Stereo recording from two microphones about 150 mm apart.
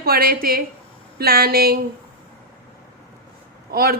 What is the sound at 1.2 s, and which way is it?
Speech, 90° right.